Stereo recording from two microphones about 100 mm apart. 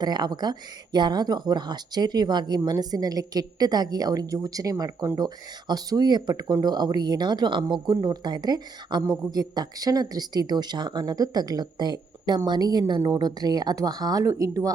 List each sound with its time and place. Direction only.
0.0 s speech: 45° right (ahead or behind)